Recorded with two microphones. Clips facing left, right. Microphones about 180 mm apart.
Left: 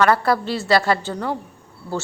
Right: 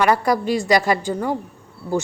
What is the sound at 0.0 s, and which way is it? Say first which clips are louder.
A woman's voice: even; 15° right (ahead or behind).